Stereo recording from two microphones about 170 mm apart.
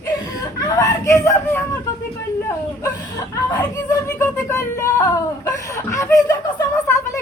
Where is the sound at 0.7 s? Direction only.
20° left (ahead or behind).